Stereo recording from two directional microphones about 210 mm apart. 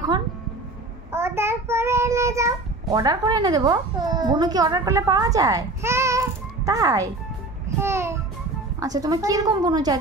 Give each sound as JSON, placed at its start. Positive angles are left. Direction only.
{"t": 1.1, "sound": "child singing", "side_deg": -10}
{"t": 7.8, "sound": "music", "side_deg": -10}
{"t": 8.7, "sound": "a woman's voice", "side_deg": -15}